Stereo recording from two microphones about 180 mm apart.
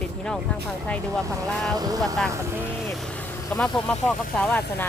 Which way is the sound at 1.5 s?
5° left (ahead or behind).